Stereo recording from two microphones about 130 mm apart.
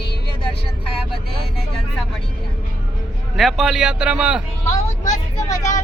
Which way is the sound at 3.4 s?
Centre (ahead or behind).